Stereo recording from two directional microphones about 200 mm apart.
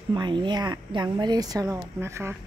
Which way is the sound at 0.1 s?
20° right (ahead or behind).